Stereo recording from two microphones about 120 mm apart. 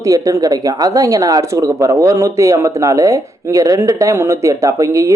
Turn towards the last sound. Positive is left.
turn(degrees=-25)  # may be behind; listen again after turning